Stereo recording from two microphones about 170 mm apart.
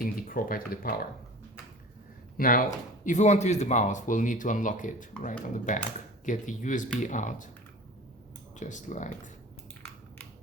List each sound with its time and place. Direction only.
0.0 s speech: 55° left (ahead or behind)
2.4 s speech: 55° left (ahead or behind)
8.5 s speech: 45° left (ahead or behind)